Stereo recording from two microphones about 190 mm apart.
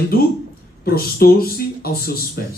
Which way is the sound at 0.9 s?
50° left (ahead or behind).